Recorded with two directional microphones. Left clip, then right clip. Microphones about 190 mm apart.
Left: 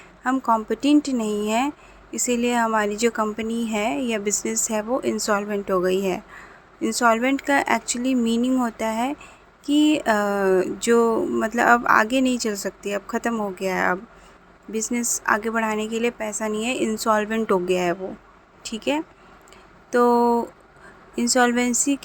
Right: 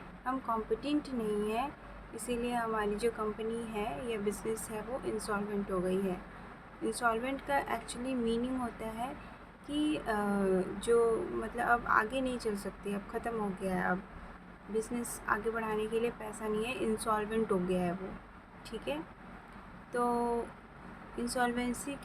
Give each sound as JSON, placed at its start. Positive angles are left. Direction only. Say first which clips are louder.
{"t": 0.3, "sound": "speech", "louder": "left 13 dB", "side_deg": 45}